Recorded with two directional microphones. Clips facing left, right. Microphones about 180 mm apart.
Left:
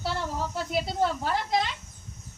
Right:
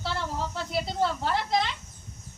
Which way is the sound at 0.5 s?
10° left (ahead or behind).